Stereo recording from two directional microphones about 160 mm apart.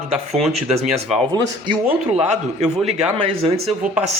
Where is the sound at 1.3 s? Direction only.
30° right (ahead or behind).